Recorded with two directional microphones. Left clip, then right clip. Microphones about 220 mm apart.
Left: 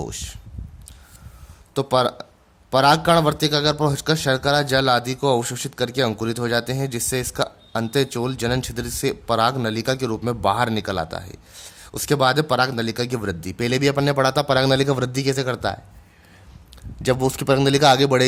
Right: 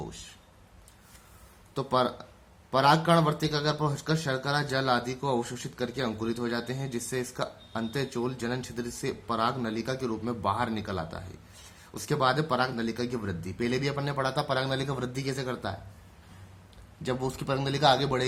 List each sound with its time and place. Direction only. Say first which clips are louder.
1.7 s a man's voice: left 8 dB; 50° left (ahead or behind)
17.0 s a man's voice: left 11 dB; 50° left (ahead or behind)